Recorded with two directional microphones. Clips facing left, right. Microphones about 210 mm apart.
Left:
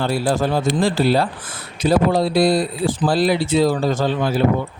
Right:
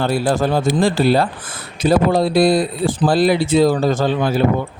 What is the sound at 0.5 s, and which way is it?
Speech, 50° right (ahead or behind).